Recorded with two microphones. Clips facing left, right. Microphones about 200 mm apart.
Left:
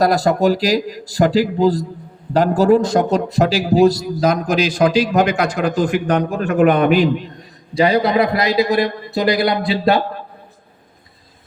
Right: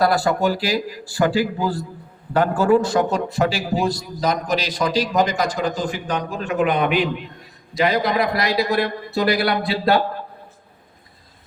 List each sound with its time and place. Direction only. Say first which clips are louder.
0.0 s a man's voice: left 4 dB; 40° left (ahead or behind)
7.7 s a man's voice: left 5 dB; 30° left (ahead or behind)